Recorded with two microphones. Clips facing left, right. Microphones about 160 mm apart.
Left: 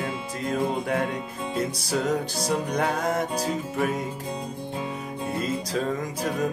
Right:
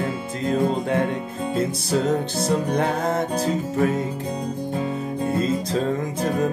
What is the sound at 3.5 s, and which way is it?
Music, 45° right (ahead or behind).